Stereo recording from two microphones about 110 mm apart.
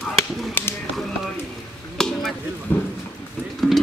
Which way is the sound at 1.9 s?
5° left (ahead or behind).